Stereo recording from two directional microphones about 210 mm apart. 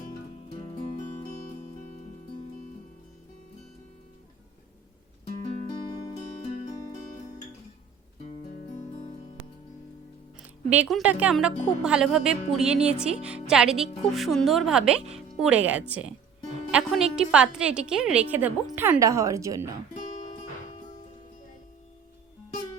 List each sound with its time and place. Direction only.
0.5 s music: 30° left (ahead or behind)
5.4 s music: 25° left (ahead or behind)
10.4 s a woman's voice: 5° right (ahead or behind)